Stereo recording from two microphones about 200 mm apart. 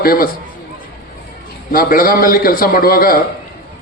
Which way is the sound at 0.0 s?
50° left (ahead or behind).